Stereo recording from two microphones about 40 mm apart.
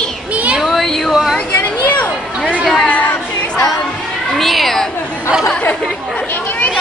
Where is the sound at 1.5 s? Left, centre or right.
Left.